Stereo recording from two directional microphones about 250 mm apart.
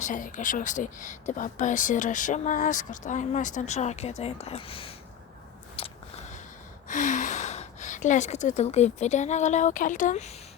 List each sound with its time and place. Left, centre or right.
0.0 s speech: left
5.8 s a sound: left
6.8 s speech: left